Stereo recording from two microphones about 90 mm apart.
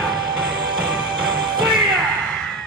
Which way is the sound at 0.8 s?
10° right (ahead or behind).